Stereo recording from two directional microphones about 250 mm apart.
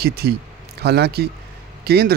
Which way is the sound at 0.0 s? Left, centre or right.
Right.